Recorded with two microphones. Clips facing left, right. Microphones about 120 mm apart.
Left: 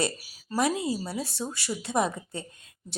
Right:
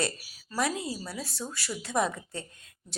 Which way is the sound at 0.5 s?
20° left (ahead or behind).